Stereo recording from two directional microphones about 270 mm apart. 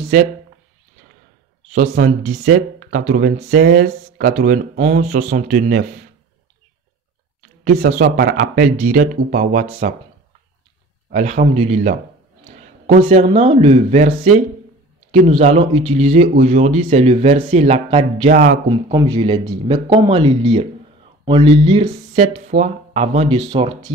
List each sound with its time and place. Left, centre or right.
0.0 s speech: right
1.7 s speech: right
7.6 s speech: right
11.1 s speech: right
18.7 s speech: centre